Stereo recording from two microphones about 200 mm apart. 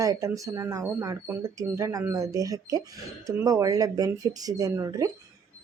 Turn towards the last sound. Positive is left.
turn(degrees=-15)  # may be behind; listen again after turning